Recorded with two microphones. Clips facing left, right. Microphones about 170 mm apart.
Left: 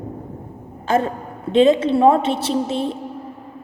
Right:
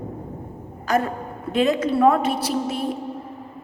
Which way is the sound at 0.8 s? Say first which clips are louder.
Left 3 dB; 25° left (ahead or behind).